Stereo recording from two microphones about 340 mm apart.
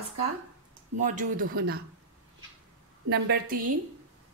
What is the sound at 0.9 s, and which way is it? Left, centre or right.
Speech, right.